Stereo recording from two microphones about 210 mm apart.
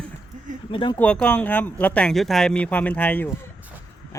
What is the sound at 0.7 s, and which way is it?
Speech, 25° left (ahead or behind).